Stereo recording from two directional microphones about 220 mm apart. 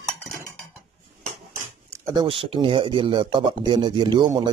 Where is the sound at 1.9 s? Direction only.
15° right (ahead or behind).